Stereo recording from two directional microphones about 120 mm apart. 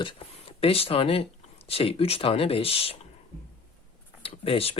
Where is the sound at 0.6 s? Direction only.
55° left (ahead or behind).